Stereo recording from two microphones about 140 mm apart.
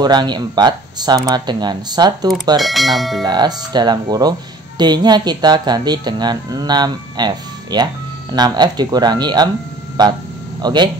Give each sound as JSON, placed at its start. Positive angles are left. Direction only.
{"t": 0.0, "sound": "speech", "side_deg": -30}
{"t": 2.6, "sound": "speech", "side_deg": 0}
{"t": 3.3, "sound": "speech", "side_deg": -30}
{"t": 10.6, "sound": "speech", "side_deg": -30}